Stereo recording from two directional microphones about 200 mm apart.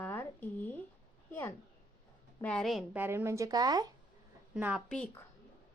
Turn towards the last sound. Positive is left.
turn(degrees=5)  # may be behind; listen again after turning